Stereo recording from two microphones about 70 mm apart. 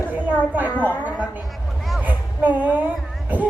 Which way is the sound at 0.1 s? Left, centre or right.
Right.